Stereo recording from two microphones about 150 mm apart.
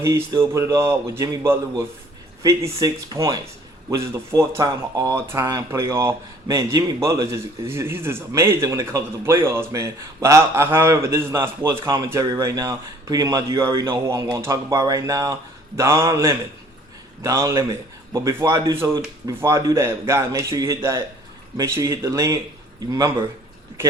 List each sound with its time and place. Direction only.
0.0 s speech: 20° right (ahead or behind)